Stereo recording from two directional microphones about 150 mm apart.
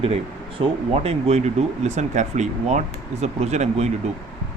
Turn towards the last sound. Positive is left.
turn(degrees=-50)  # may be behind; listen again after turning